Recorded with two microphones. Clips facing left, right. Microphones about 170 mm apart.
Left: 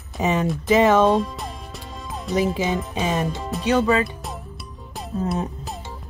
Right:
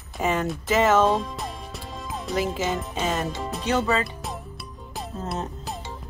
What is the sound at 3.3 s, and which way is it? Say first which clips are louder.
Speech: left 2 dB; centre (ahead or behind).